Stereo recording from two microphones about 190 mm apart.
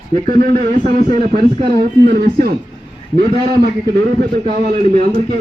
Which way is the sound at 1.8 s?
55° right (ahead or behind).